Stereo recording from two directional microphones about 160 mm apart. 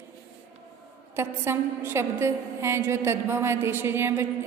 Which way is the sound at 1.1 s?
15° right (ahead or behind).